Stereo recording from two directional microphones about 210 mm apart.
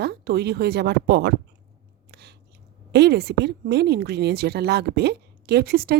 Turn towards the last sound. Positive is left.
turn(degrees=-50)  # may be behind; listen again after turning